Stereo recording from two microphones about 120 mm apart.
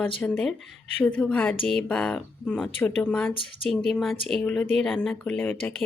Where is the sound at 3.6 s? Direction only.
Centre (ahead or behind).